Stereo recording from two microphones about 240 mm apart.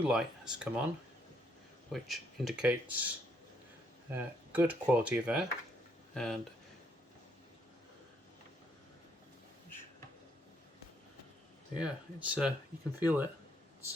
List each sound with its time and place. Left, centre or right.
0.1 s speech: centre
1.9 s speech: centre
11.8 s speech: centre